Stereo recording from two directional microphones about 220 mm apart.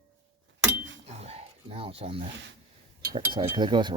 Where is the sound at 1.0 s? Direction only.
30° right (ahead or behind).